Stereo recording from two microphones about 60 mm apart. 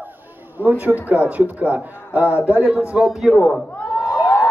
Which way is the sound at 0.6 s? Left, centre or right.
Right.